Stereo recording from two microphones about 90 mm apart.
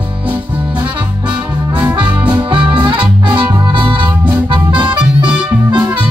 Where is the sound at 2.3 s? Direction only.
65° right (ahead or behind).